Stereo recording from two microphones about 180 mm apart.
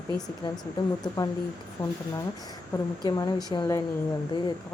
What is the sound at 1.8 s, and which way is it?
Speech, 25° left (ahead or behind).